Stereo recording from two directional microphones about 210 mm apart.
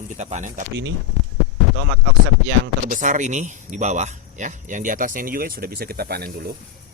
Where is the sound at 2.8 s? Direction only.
35° right (ahead or behind).